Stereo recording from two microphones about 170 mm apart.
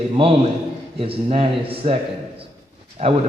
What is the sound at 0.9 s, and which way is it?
Speech, 35° right (ahead or behind).